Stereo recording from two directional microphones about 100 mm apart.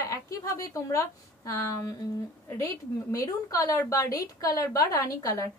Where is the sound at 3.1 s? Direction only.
35° left (ahead or behind).